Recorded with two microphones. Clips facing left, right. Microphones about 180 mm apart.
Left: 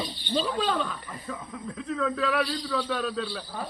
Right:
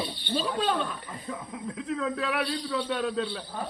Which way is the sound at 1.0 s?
20° right (ahead or behind).